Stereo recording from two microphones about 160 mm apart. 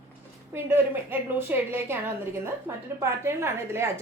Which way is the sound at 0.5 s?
15° right (ahead or behind).